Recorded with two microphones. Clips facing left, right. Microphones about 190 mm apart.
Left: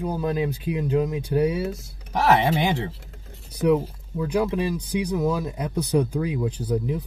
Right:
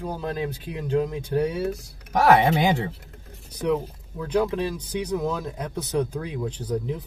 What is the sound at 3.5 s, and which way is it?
Speech, 10° left (ahead or behind).